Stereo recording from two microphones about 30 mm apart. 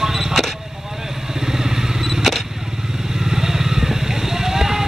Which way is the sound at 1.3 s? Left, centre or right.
Centre.